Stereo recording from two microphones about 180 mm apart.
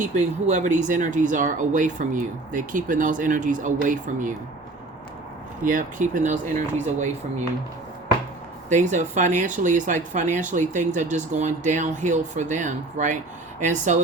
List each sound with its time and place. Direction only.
0.0 s speech: 40° right (ahead or behind)
5.6 s speech: 45° right (ahead or behind)
8.7 s speech: 45° right (ahead or behind)